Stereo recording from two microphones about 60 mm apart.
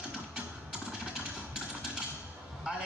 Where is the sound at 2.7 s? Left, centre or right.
Centre.